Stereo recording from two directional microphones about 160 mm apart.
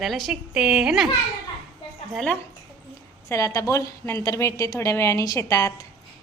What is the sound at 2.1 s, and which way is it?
Speech, centre (ahead or behind).